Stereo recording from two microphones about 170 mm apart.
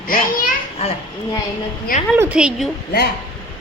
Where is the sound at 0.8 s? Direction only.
35° left (ahead or behind).